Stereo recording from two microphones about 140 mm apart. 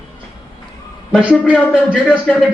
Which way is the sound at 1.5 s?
5° left (ahead or behind).